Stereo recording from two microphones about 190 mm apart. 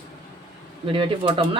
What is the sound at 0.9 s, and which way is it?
Speech, 25° right (ahead or behind).